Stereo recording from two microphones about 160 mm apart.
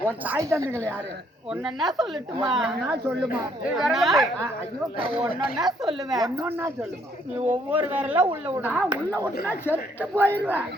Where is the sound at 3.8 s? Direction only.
Centre (ahead or behind).